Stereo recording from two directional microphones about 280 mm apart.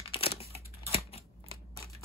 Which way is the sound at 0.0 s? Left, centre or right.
Centre.